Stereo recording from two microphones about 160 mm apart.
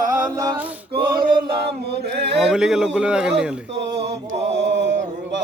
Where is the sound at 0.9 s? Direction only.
65° right (ahead or behind); by 2.4 s 90° right.